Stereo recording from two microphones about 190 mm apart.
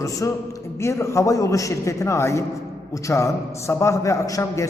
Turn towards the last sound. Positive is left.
turn(degrees=15)  # may be behind; listen again after turning